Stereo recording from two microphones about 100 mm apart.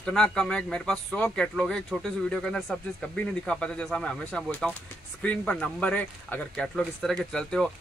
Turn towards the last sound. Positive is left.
turn(degrees=5)  # may be behind; listen again after turning